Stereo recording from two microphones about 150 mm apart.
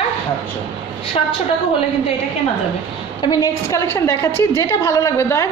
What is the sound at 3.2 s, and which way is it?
A woman's voice, 25° left (ahead or behind).